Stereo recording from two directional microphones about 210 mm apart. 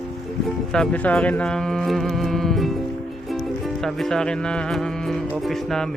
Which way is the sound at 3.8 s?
Centre (ahead or behind).